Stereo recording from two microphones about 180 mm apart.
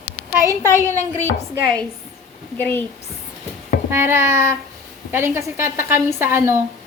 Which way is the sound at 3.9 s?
15° right (ahead or behind).